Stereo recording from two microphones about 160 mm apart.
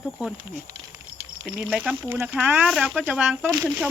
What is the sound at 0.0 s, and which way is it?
Speech, 5° right (ahead or behind).